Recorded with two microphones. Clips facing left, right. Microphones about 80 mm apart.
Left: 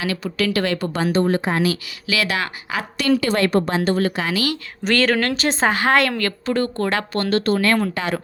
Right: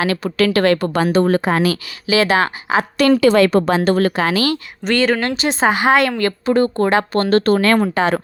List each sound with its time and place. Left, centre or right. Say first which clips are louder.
0.0 s speech: right 6 dB; right
1.1 s speech: right 3 dB; right
2.0 s speech: right 8 dB; right
3.2 s speech: right 6 dB; right
4.1 s speech: right 5 dB; right
4.8 s speech: right 1 dB; centre
6.1 s speech: right 6 dB; right
7.1 s speech: right 5 dB; right
7.8 s speech: right 6 dB; right